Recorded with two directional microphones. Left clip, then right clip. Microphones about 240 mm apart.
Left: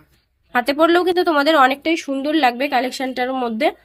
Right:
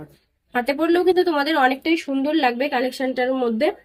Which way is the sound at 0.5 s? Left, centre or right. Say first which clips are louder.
Left 4 dB; left.